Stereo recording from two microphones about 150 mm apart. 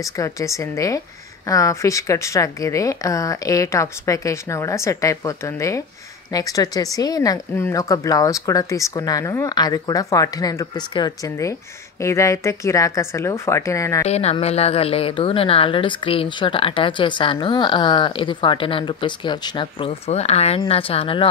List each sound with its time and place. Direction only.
0.0 s speech: 20° left (ahead or behind)
14.0 s a woman's voice: 45° left (ahead or behind)